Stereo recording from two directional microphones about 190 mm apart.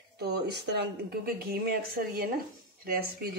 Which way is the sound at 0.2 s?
60° right (ahead or behind).